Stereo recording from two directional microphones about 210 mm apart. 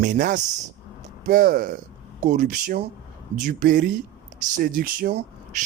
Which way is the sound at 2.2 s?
40° right (ahead or behind).